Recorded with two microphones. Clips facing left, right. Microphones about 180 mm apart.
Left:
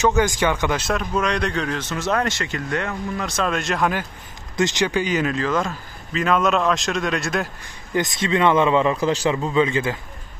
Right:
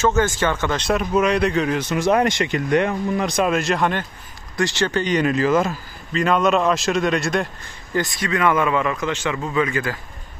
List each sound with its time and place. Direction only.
0.0 s speech: 15° left (ahead or behind)
0.8 s speech: 5° right (ahead or behind)
3.5 s a man's voice: centre (ahead or behind)
4.6 s a man's voice: 20° left (ahead or behind); by 7.4 s centre (ahead or behind)
7.9 s a man's voice: 20° left (ahead or behind)